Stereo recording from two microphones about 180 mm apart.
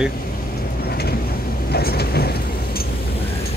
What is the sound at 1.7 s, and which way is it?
Vehicle, 60° left (ahead or behind).